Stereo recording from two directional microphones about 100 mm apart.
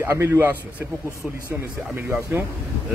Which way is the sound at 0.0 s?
25° right (ahead or behind).